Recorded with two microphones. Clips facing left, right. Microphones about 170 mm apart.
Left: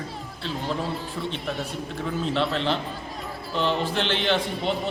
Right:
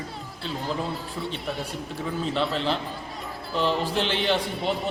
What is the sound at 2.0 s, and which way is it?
Speech, centre (ahead or behind).